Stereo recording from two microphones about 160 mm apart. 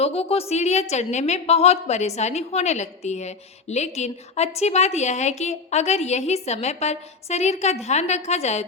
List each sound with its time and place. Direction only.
0.0 s a woman's voice: 40° left (ahead or behind)